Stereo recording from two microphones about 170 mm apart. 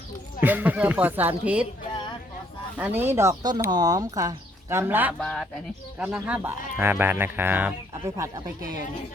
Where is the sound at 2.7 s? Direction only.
10° right (ahead or behind).